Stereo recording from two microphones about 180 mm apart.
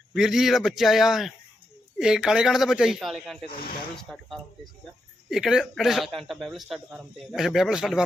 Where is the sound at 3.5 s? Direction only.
55° left (ahead or behind).